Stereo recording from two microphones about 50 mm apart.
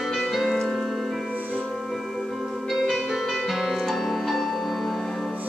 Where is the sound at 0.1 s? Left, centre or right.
Centre.